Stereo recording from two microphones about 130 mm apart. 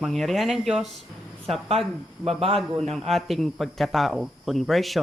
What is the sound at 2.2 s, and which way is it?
Speech, 50° right (ahead or behind).